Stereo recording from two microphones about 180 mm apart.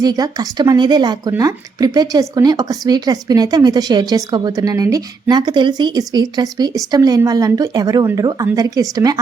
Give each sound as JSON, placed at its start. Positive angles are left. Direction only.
{"t": 0.0, "sound": "speech", "side_deg": -20}